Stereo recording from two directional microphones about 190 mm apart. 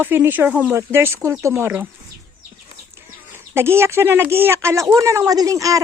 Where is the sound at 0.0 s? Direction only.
10° right (ahead or behind).